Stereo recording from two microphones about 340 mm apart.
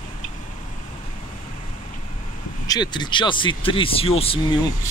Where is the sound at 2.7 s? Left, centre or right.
Centre.